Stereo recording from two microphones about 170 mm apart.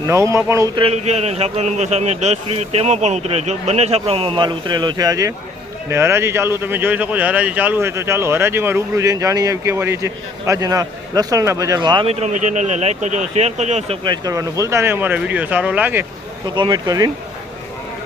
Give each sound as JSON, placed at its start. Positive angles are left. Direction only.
{"t": 0.1, "sound": "speech", "side_deg": -15}
{"t": 0.8, "sound": "a man's voice", "side_deg": -40}
{"t": 12.2, "sound": "speech", "side_deg": -45}
{"t": 16.6, "sound": "speech", "side_deg": -25}